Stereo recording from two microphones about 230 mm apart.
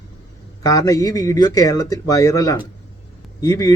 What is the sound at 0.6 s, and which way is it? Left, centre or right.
A man's voice, centre.